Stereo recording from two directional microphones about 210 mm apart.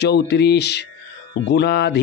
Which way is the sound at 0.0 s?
50° left (ahead or behind).